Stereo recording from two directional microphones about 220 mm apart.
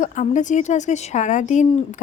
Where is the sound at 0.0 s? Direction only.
35° left (ahead or behind).